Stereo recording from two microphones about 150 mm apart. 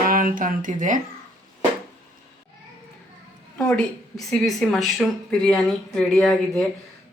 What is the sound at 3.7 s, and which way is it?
Speech, 5° left (ahead or behind).